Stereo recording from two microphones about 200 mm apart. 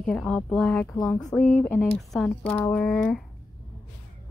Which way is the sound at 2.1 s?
5° left (ahead or behind).